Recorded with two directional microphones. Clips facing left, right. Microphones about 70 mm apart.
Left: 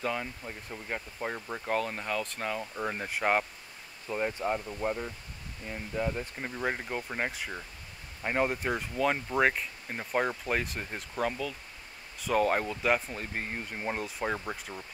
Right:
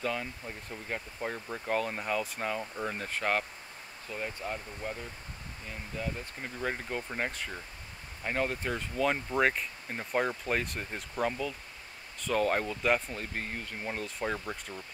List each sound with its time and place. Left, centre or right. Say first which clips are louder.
0.0 s speech: left 1 dB; centre
1.7 s speech: even; centre
2.8 s speech: left 5 dB; centre
4.1 s speech: left 6 dB; left
8.9 s speech: even; centre
12.2 s speech: left 2 dB; centre